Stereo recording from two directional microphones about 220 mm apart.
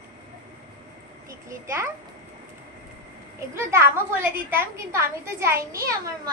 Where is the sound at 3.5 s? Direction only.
10° right (ahead or behind).